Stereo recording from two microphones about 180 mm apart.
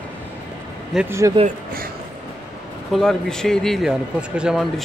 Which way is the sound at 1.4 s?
55° right (ahead or behind).